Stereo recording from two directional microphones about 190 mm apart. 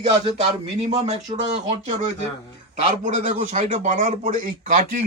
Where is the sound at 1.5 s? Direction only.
35° right (ahead or behind).